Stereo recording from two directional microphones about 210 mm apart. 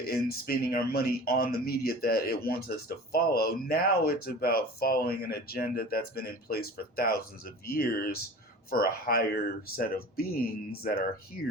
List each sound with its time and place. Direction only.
0.0 s speech: 45° left (ahead or behind)